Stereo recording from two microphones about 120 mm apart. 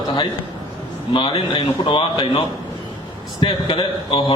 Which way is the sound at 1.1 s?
45° left (ahead or behind).